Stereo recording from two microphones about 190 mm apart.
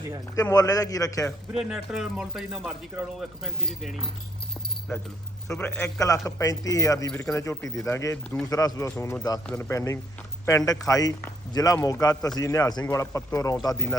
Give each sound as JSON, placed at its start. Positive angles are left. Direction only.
{"t": 0.5, "sound": "a man's voice", "side_deg": 20}
{"t": 1.5, "sound": "speech", "side_deg": 0}
{"t": 7.1, "sound": "speech", "side_deg": 5}
{"t": 7.3, "sound": "a man's voice", "side_deg": 15}